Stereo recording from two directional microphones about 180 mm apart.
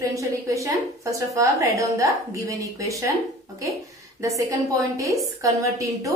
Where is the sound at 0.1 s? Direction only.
20° right (ahead or behind).